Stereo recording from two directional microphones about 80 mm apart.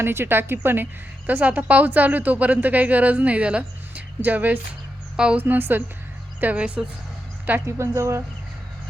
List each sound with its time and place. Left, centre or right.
0.0 s a woman's voice: right; by 5.4 s centre
5.4 s a woman's voice: right
7.6 s speech: right